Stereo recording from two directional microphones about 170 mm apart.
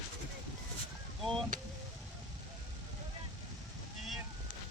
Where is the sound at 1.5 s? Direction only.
50° right (ahead or behind).